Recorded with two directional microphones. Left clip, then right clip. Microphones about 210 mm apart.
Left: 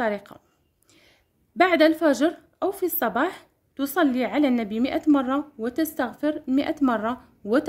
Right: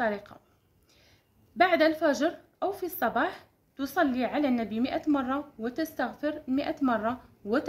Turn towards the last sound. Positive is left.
turn(degrees=55)  # may be behind; listen again after turning